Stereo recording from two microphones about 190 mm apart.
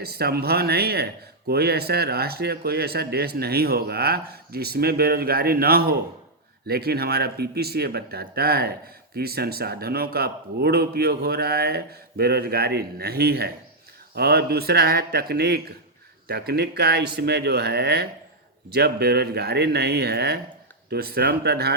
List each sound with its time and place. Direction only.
0.0 s speech: 55° right (ahead or behind)